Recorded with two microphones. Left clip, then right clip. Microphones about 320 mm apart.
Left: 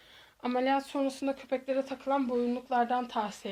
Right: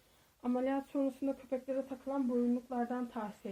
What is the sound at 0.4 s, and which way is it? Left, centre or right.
Speech, left.